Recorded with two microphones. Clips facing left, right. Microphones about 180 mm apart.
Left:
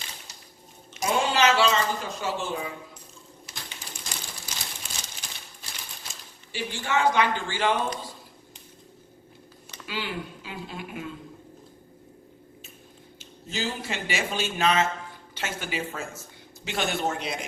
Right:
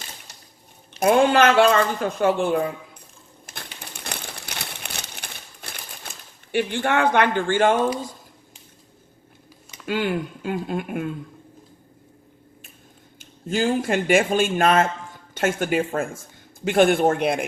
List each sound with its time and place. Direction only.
0.9 s speech: 60° right (ahead or behind)
3.4 s typewriter: 60° right (ahead or behind)
9.8 s speech: 50° right (ahead or behind)
13.1 s speech: 50° right (ahead or behind)